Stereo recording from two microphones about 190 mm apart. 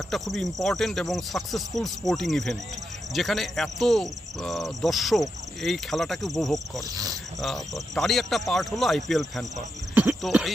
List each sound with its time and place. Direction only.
0.1 s speech: centre (ahead or behind)
6.9 s cricket: 20° right (ahead or behind)
7.4 s speech: centre (ahead or behind)
9.9 s cricket: 10° right (ahead or behind)